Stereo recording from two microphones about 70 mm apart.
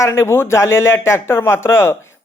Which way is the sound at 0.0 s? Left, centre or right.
Left.